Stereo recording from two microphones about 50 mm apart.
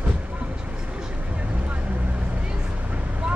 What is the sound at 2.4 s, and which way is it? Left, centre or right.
Vehicle, centre.